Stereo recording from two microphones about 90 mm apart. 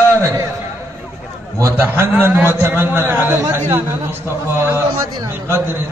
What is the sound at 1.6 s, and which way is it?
A man's voice, 30° right (ahead or behind).